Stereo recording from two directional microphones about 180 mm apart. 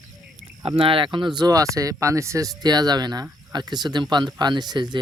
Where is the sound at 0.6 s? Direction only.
30° right (ahead or behind).